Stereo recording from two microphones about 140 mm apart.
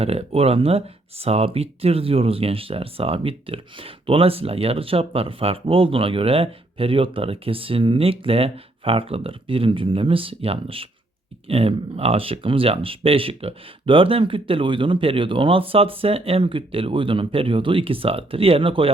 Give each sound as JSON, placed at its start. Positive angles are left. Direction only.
{"t": 0.0, "sound": "speech", "side_deg": -45}